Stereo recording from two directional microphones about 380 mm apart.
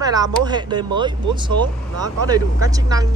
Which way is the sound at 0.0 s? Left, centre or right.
Centre.